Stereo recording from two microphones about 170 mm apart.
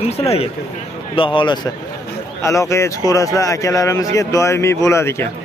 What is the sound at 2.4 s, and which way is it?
Speech, 20° left (ahead or behind).